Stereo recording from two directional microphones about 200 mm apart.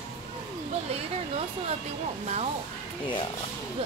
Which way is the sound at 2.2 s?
35° right (ahead or behind).